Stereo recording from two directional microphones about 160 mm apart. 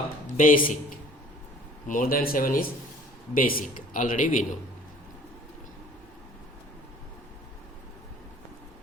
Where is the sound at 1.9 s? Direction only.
60° left (ahead or behind).